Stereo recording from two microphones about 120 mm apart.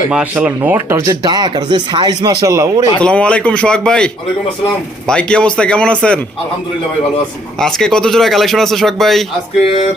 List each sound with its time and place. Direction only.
0.1 s speech: 10° right (ahead or behind); by 2.9 s 30° right (ahead or behind)
3.0 s speech: 10° left (ahead or behind)
7.6 s speech: 5° left (ahead or behind)
9.6 s a sound: 60° left (ahead or behind)